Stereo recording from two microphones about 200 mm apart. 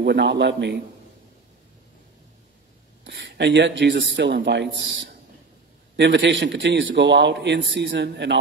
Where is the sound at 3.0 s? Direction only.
60° right (ahead or behind).